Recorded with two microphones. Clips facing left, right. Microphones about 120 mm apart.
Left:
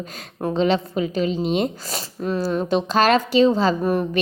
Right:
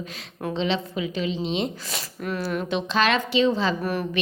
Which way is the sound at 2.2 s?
30° left (ahead or behind).